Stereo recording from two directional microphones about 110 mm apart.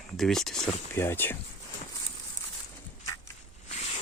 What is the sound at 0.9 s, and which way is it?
Speech, 20° left (ahead or behind).